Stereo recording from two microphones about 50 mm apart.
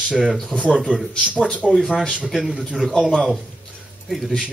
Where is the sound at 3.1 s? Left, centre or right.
Centre.